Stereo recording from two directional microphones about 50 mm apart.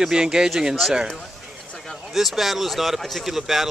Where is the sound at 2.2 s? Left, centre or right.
Centre.